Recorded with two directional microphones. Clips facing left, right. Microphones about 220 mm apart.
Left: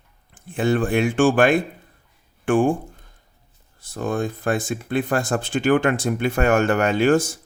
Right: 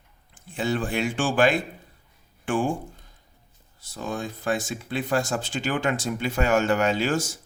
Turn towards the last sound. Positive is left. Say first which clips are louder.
# left 6 dB
turn(degrees=55)  # may be behind; listen again after turning